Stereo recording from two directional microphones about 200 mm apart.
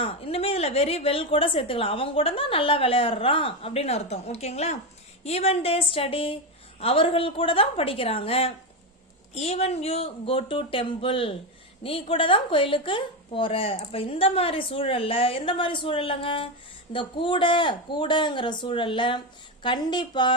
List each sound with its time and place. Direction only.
0.0 s a woman's voice: 30° left (ahead or behind)